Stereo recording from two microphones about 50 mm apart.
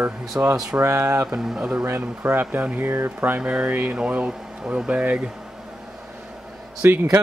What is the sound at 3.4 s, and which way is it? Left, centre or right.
Speech, right.